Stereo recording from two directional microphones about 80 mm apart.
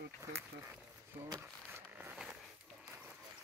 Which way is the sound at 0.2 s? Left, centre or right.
Right.